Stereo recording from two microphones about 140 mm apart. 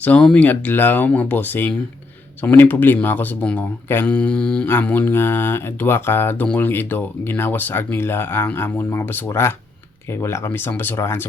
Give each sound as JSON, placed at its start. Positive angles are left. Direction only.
{"t": 0.0, "sound": "speech", "side_deg": 10}